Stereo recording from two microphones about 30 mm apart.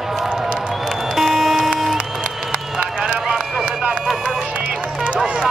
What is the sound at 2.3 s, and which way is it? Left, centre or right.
Run, centre.